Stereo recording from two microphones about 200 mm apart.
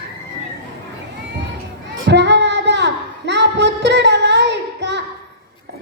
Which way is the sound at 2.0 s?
60° right (ahead or behind).